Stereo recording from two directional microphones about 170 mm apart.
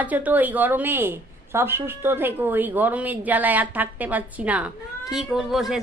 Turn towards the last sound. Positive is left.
turn(degrees=0)  # may be behind; listen again after turning